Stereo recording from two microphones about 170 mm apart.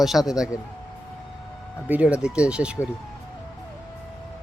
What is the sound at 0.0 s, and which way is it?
Speech, centre (ahead or behind).